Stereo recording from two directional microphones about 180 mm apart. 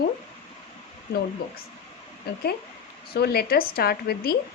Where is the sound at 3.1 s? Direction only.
60° left (ahead or behind).